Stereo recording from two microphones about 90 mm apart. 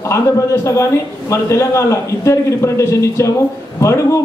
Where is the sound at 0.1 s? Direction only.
35° left (ahead or behind).